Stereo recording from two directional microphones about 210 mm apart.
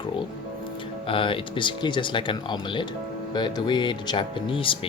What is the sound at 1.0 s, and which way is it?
Speech, 25° left (ahead or behind).